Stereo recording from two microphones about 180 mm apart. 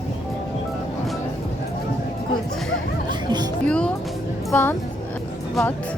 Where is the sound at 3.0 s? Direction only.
25° right (ahead or behind).